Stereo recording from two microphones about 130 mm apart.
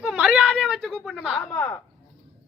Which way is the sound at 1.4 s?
25° left (ahead or behind).